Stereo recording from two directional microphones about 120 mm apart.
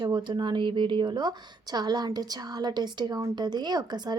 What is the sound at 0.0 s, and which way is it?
Speech, 40° right (ahead or behind).